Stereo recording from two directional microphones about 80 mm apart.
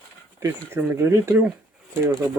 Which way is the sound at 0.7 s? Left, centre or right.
Right.